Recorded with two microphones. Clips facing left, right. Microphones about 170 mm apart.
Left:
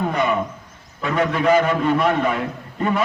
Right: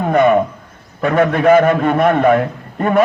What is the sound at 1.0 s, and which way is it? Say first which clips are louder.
A man's voice: right 6 dB; 55° right (ahead or behind).